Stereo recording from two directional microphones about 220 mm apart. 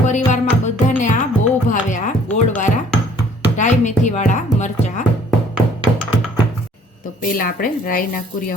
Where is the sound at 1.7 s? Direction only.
35° left (ahead or behind).